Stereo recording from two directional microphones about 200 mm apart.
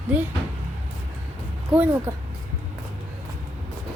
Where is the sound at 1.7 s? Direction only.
10° right (ahead or behind).